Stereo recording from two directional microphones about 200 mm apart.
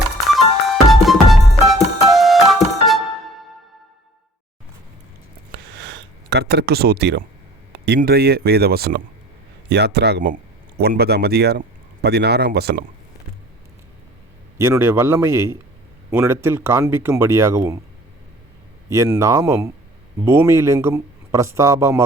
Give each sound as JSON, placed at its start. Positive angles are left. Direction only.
{"t": 0.3, "sound": "music", "side_deg": 0}
{"t": 5.5, "sound": "a sound", "side_deg": -55}
{"t": 7.7, "sound": "speech", "side_deg": -50}
{"t": 14.6, "sound": "speech", "side_deg": -15}
{"t": 18.9, "sound": "speech", "side_deg": -15}